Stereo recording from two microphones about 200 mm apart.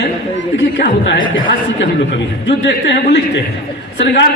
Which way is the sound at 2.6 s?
60° left (ahead or behind).